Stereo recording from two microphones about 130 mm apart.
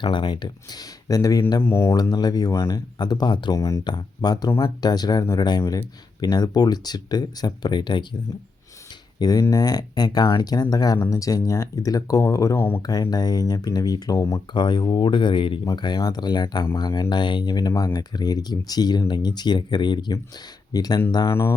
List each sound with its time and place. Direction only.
0.0 s speech: 40° left (ahead or behind); by 2.0 s 20° left (ahead or behind)
2.0 s speech: 30° left (ahead or behind)
9.1 s speech: 30° left (ahead or behind)
12.8 s speech: 30° left (ahead or behind)
14.5 s speech: 35° left (ahead or behind)